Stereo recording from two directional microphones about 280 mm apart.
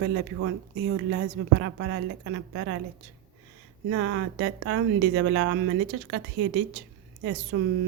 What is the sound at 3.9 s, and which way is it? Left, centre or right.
A woman's voice, right.